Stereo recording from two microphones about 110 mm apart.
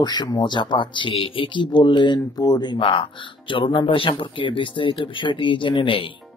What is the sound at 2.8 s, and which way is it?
Speech, 50° left (ahead or behind).